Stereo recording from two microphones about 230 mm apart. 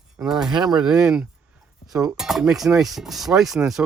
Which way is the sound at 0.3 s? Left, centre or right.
Centre.